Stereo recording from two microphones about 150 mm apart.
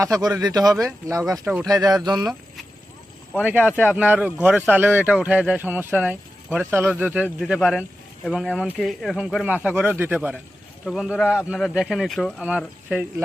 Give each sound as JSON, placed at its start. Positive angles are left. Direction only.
{"t": 0.0, "sound": "speech", "side_deg": -25}
{"t": 3.4, "sound": "a man's voice", "side_deg": -10}
{"t": 10.8, "sound": "a man's voice", "side_deg": 0}